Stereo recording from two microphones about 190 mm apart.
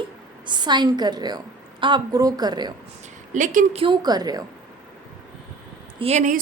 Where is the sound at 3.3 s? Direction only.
45° right (ahead or behind).